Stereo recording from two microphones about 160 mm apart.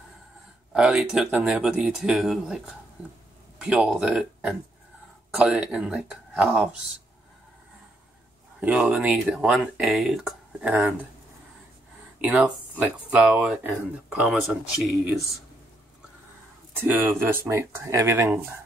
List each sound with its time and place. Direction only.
0.7 s speech: 5° right (ahead or behind)
8.5 s speech: 5° right (ahead or behind)
12.2 s speech: 10° right (ahead or behind)
16.7 s speech: 10° right (ahead or behind)